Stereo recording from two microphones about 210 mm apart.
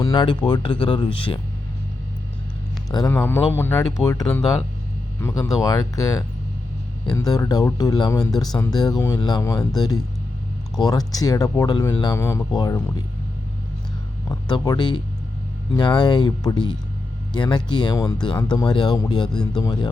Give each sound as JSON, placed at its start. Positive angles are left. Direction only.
{"t": 0.0, "sound": "speech", "side_deg": 20}
{"t": 2.9, "sound": "speech", "side_deg": 15}
{"t": 14.3, "sound": "speech", "side_deg": 20}